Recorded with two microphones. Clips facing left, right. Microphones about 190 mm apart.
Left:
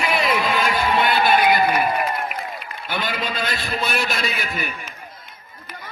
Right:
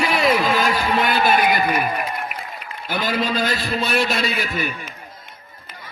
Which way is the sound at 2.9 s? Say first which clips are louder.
Right 4 dB; 45° right (ahead or behind).